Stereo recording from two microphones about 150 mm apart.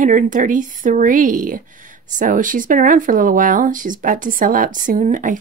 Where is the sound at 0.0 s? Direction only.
60° right (ahead or behind).